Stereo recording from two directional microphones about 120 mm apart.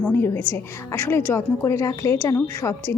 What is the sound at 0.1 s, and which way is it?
A woman's voice, 20° left (ahead or behind).